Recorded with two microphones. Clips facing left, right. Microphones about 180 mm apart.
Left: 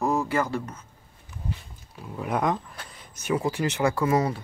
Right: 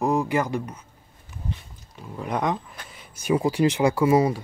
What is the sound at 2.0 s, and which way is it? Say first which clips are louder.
Speech: even; 5° left (ahead or behind).